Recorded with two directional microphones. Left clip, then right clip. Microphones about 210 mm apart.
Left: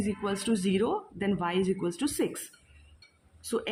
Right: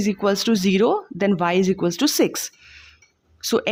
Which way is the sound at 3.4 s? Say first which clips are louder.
Right 11 dB; 45° right (ahead or behind).